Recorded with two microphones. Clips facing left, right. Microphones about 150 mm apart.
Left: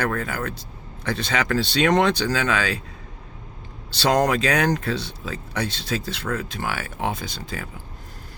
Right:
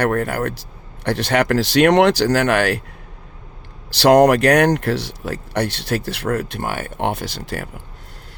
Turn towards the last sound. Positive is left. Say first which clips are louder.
# right 5 dB
turn(degrees=-70)  # may be behind; listen again after turning